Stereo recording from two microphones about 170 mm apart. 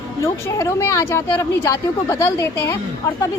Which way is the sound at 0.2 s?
15° left (ahead or behind).